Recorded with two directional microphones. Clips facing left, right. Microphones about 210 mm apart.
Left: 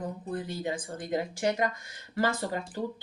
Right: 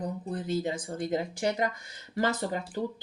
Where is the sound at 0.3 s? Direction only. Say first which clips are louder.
Right 3 dB; 20° right (ahead or behind).